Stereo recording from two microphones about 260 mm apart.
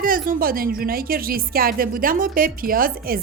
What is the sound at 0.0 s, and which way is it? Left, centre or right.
A woman's voice, right.